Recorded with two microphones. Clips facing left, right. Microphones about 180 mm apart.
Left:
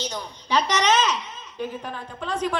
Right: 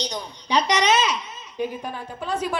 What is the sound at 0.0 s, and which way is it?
A woman's voice, 15° right (ahead or behind).